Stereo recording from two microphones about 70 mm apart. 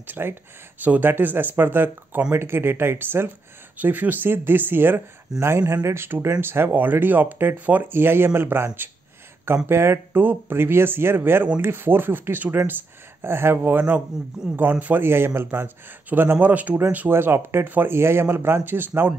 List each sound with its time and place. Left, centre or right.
0.0 s speech: right
5.3 s speech: centre
5.9 s speech: right
17.1 s speech: right